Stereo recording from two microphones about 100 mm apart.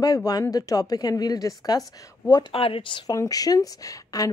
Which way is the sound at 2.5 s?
65° left (ahead or behind).